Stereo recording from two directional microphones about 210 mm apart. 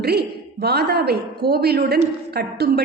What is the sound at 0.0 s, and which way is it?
A woman's voice, 50° right (ahead or behind).